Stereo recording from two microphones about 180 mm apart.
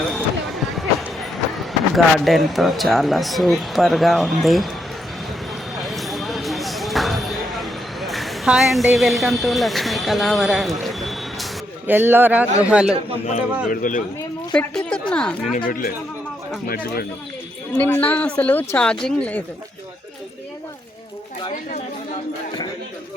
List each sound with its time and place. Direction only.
0.1 s basketball bounce: centre (ahead or behind)
2.1 s speech: centre (ahead or behind)
5.7 s a sound: centre (ahead or behind)
11.9 s a man's voice: 10° right (ahead or behind)
13.2 s speech: 45° left (ahead or behind)
14.5 s a woman's voice: 5° left (ahead or behind)
15.5 s speech: 55° left (ahead or behind)
17.7 s a woman's voice: 10° left (ahead or behind)